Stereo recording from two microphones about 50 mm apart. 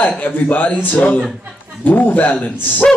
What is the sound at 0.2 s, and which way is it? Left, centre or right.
A man's voice, left.